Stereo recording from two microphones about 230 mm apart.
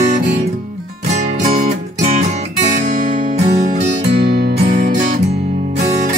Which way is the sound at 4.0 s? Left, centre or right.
Right.